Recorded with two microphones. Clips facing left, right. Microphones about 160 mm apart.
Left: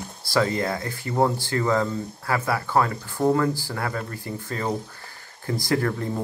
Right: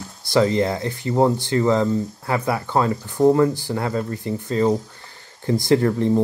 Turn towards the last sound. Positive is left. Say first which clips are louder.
# right 7 dB
turn(degrees=-25)  # may be behind; listen again after turning